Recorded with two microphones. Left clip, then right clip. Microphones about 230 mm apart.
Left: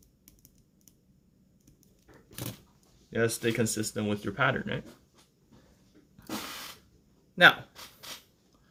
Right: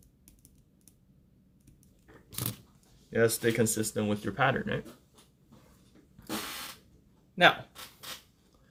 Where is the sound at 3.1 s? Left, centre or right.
Centre.